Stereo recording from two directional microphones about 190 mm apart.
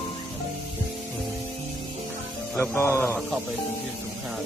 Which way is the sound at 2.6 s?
10° left (ahead or behind).